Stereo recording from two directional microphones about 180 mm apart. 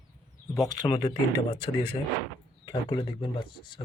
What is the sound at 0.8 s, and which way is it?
Speech, 25° left (ahead or behind).